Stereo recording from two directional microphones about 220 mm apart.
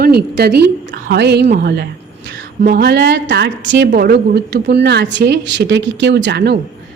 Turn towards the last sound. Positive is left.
turn(degrees=-50)  # may be behind; listen again after turning